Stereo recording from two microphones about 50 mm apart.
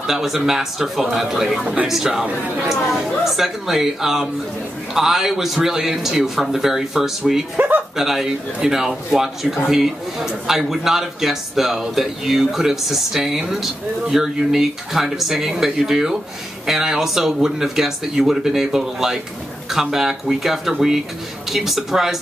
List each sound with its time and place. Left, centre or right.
0.0 s a man's voice: centre
7.5 s speech: right
7.9 s a man's voice: centre